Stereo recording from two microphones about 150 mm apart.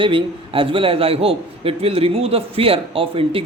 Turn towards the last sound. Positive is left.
turn(degrees=-40)  # may be behind; listen again after turning